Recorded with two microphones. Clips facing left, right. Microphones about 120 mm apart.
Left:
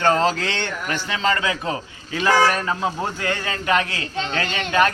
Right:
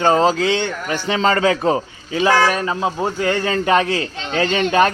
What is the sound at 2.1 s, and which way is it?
Speech, 15° right (ahead or behind).